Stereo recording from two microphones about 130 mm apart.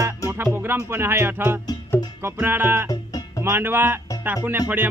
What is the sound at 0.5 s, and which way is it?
Speech, 15° right (ahead or behind).